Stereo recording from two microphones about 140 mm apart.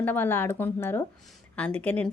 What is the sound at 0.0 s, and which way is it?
A woman's voice, 15° left (ahead or behind).